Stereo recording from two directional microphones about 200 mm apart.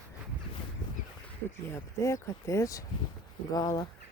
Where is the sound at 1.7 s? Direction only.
15° left (ahead or behind).